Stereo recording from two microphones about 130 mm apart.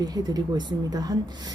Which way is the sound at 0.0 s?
30° right (ahead or behind).